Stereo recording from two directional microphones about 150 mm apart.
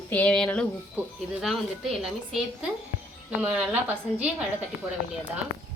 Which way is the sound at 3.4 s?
10° right (ahead or behind).